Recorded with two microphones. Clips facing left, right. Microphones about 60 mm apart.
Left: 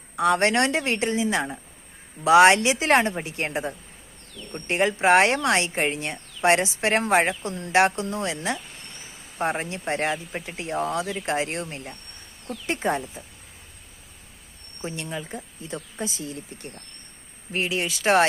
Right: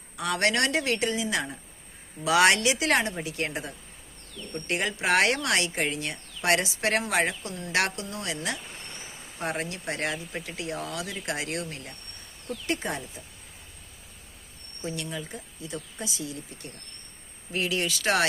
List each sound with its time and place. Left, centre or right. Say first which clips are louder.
0.2 s speech: left 5 dB; left
9.4 s speech: left 5 dB; left
14.8 s speech: left 2 dB; left